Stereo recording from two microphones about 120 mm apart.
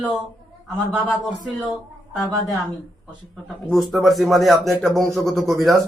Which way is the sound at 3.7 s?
Centre (ahead or behind).